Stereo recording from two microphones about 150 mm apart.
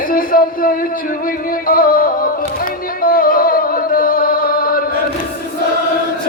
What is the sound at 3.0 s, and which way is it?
Chant, 70° left (ahead or behind).